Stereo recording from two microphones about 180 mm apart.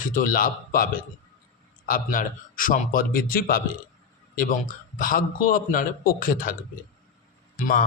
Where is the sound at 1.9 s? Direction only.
50° left (ahead or behind).